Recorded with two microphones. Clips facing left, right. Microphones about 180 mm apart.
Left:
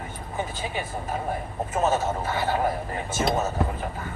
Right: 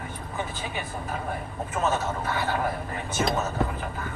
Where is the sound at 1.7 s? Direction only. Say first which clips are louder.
Left 3 dB; 25° left (ahead or behind).